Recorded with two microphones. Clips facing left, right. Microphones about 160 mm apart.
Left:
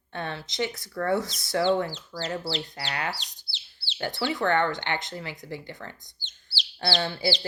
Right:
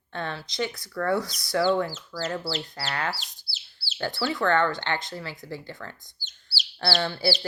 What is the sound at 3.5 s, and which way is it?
Bird, 20° left (ahead or behind).